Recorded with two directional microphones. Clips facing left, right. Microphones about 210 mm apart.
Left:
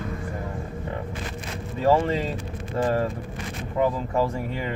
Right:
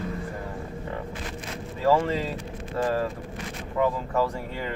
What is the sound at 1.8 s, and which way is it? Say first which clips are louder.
Speech: left 2 dB; 25° left (ahead or behind).